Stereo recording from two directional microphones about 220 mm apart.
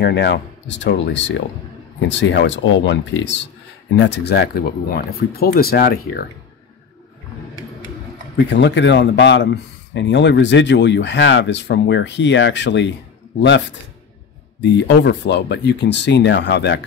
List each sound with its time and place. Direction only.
0.0 s speech: 50° left (ahead or behind)
8.5 s speech: 55° left (ahead or behind)
14.6 s speech: 50° left (ahead or behind)